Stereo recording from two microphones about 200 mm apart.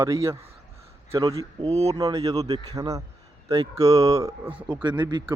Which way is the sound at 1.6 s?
30° right (ahead or behind).